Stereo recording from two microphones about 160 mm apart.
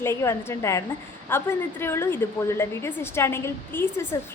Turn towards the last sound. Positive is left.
turn(degrees=15)  # may be behind; listen again after turning